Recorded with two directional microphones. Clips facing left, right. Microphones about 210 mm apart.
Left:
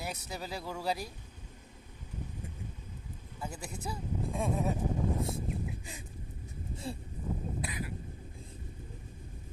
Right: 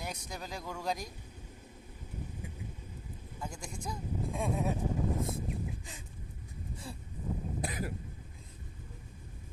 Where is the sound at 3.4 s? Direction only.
5° left (ahead or behind).